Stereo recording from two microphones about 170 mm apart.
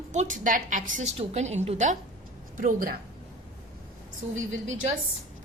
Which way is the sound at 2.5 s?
55° right (ahead or behind).